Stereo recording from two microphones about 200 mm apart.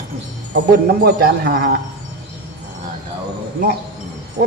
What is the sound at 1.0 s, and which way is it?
Speech, 50° right (ahead or behind).